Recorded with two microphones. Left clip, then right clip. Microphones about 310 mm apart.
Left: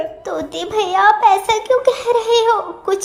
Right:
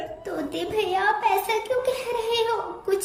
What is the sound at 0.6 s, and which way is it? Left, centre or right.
A child's voice, centre.